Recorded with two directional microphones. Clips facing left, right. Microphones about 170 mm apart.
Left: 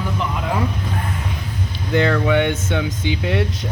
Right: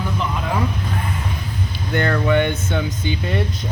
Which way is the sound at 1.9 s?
90° left.